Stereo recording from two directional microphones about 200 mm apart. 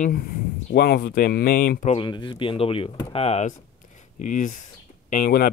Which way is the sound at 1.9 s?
25° left (ahead or behind).